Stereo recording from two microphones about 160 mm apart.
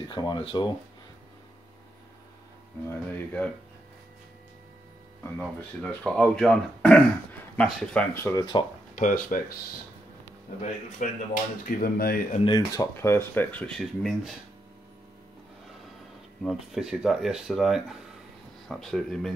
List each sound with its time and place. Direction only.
0.1 s speech: 30° left (ahead or behind)
2.9 s speech: 10° left (ahead or behind)
5.4 s speech: 5° left (ahead or behind)
8.2 s speech: 20° left (ahead or behind)
8.9 s speech: 55° left (ahead or behind)
11.0 s speech: 55° left (ahead or behind)
11.6 s speech: 65° left (ahead or behind)
12.4 s speech: 25° left (ahead or behind); by 14.3 s centre (ahead or behind)
16.4 s speech: centre (ahead or behind)